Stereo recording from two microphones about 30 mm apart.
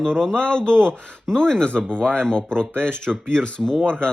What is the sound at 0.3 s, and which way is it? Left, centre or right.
Speech, left.